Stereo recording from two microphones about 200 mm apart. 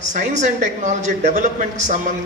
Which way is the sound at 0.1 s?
35° right (ahead or behind).